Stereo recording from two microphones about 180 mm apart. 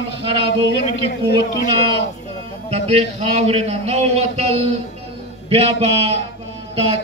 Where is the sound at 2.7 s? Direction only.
35° right (ahead or behind).